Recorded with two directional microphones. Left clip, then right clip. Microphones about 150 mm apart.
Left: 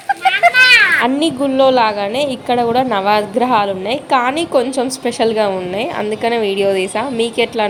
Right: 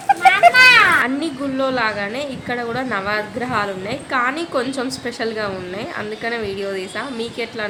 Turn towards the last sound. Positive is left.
turn(degrees=35)  # may be behind; listen again after turning